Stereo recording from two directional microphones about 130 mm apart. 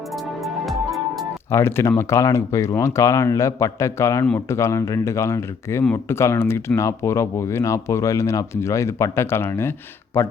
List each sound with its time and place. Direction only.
0.4 s music: centre (ahead or behind)
1.5 s speech: 20° left (ahead or behind)